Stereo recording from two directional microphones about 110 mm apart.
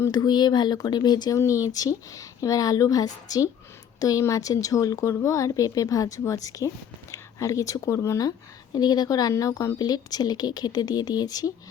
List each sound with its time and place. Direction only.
0.1 s a woman's voice: 40° left (ahead or behind)
8.7 s a woman's voice: 40° left (ahead or behind)